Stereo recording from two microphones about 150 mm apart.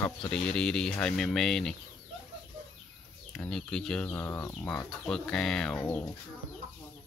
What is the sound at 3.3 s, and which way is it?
Speech, 5° left (ahead or behind).